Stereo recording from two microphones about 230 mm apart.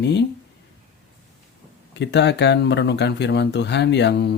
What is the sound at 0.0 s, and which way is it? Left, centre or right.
Speech, left.